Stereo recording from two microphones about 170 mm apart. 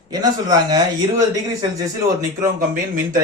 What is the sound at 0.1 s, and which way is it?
Speech, 25° right (ahead or behind).